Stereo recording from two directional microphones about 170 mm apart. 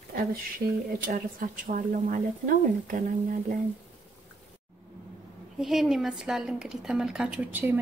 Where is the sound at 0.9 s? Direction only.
55° right (ahead or behind).